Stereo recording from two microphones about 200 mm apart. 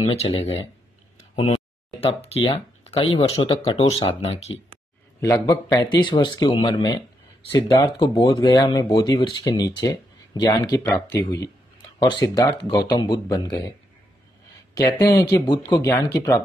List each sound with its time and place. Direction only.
0.0 s speech: 30° left (ahead or behind)
1.3 s a sound: 25° left (ahead or behind)
3.2 s speech: 25° left (ahead or behind)
5.2 s speech: 15° left (ahead or behind)